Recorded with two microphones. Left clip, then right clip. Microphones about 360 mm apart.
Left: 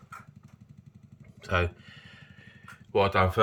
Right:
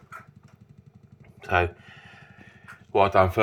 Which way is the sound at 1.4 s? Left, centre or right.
Centre.